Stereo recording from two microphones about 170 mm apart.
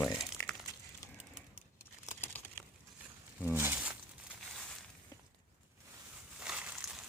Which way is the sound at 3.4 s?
10° right (ahead or behind).